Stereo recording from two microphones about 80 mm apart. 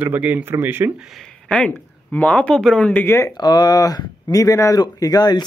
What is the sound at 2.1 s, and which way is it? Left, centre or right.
Speech, centre.